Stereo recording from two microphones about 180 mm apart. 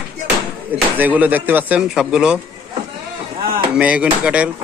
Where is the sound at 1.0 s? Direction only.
10° right (ahead or behind).